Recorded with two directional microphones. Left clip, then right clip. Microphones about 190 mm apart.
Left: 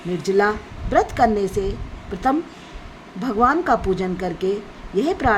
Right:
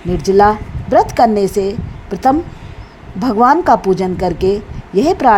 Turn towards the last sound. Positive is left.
turn(degrees=-30)  # may be behind; listen again after turning